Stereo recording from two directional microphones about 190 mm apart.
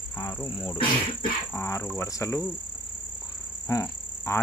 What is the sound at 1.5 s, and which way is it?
Speech, 15° left (ahead or behind).